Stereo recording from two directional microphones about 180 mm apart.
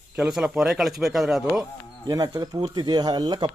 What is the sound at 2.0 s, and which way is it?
Speech, 20° right (ahead or behind).